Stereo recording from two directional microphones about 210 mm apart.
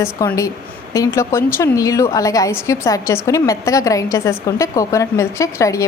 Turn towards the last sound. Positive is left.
turn(degrees=15)  # may be behind; listen again after turning